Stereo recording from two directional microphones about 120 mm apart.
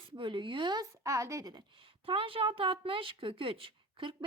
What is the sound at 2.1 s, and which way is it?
Speech, 50° right (ahead or behind).